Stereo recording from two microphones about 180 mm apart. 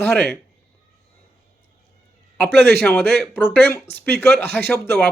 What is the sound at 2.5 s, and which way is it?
Speech, 70° right (ahead or behind).